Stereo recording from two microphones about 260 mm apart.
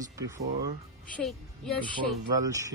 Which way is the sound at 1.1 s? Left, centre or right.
Centre.